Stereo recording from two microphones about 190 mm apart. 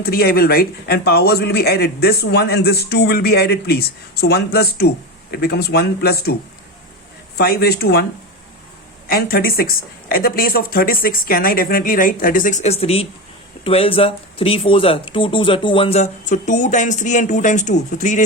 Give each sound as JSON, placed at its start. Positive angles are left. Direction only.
{"t": 0.0, "sound": "a man's voice", "side_deg": 50}
{"t": 7.3, "sound": "a man's voice", "side_deg": 55}
{"t": 9.0, "sound": "speech", "side_deg": 50}